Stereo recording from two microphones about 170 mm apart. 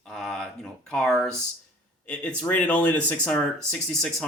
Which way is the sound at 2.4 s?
10° left (ahead or behind).